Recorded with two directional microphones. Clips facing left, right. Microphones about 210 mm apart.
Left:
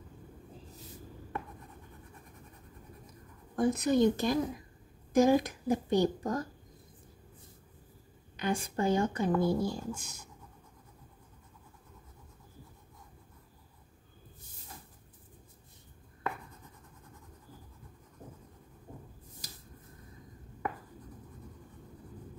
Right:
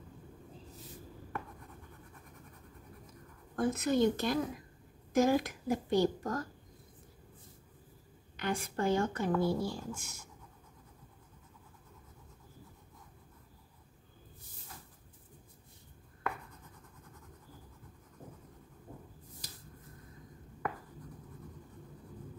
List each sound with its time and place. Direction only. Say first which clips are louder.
3.5 s speech: left 3 dB; 15° left (ahead or behind)
8.4 s speech: left 3 dB; 15° left (ahead or behind)